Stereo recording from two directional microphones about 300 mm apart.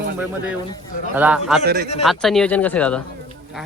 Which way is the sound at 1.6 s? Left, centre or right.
Right.